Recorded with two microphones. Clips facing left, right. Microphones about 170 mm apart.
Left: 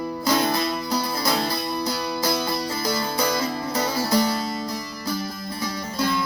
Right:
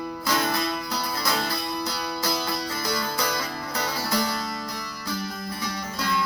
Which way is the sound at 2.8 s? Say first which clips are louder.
Left 4 dB; 25° left (ahead or behind).